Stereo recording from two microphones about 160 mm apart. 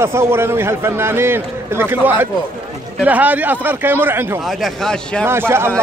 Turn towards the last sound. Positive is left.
turn(degrees=-15)  # may be behind; listen again after turning